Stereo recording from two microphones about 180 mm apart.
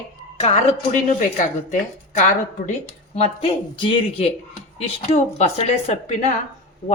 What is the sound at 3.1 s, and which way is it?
Speech, 35° left (ahead or behind).